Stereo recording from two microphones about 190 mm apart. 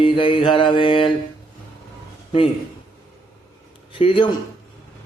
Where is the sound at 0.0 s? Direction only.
25° left (ahead or behind).